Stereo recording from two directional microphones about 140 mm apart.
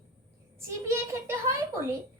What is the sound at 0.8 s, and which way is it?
A woman's voice, 20° right (ahead or behind).